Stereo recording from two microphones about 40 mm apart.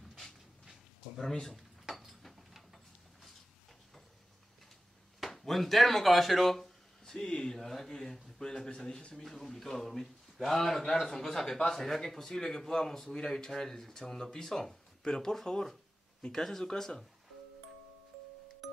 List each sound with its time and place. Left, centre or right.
1.3 s a man's voice: centre
5.2 s a man's voice: centre